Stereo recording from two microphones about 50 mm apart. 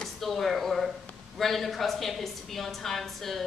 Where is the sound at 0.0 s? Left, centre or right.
Centre.